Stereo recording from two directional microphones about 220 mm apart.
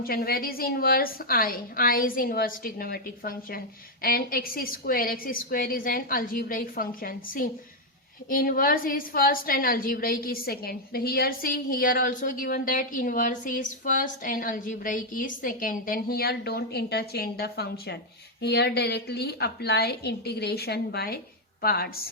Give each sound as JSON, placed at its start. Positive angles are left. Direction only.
{"t": 0.0, "sound": "a woman's voice", "side_deg": 45}